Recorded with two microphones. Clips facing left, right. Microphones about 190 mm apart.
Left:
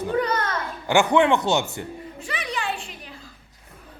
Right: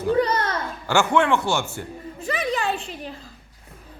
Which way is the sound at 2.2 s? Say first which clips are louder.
Right 5 dB; 40° right (ahead or behind).